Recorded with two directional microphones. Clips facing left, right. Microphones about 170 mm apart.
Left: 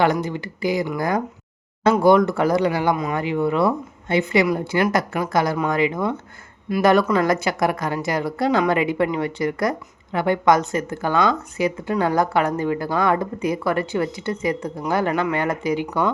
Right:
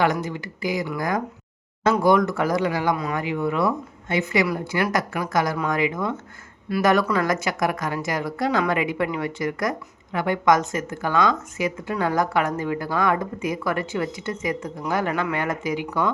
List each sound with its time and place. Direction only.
0.0 s a woman's voice: 30° left (ahead or behind)